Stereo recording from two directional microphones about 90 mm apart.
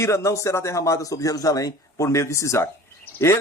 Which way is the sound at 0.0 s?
30° left (ahead or behind).